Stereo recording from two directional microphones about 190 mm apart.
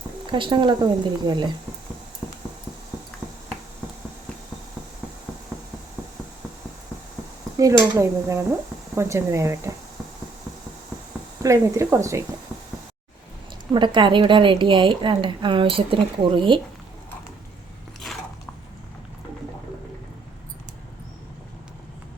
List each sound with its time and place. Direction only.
0.3 s a woman's voice: 25° right (ahead or behind)
7.5 s dishes: 15° right (ahead or behind)
11.4 s dishes: 15° right (ahead or behind)
13.7 s a woman's voice: 25° right (ahead or behind)